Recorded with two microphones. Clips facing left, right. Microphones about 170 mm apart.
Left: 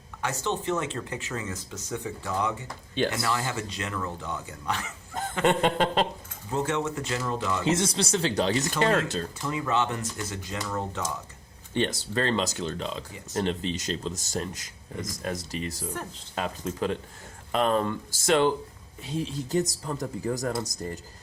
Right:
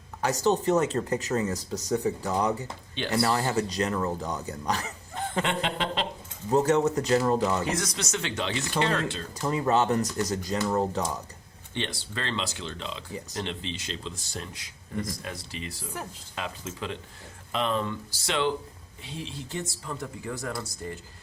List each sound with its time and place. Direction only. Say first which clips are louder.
0.2 s speech: right 5 dB; 40° right (ahead or behind)
5.5 s speech: left 6 dB; 45° left (ahead or behind)
6.5 s speech: right 6 dB; 40° right (ahead or behind)
7.6 s speech: left 4 dB; 25° left (ahead or behind); by 9.2 s 40° left (ahead or behind)
9.4 s speech: right 4 dB; 40° right (ahead or behind)
11.7 s speech: left 7 dB; 45° left (ahead or behind)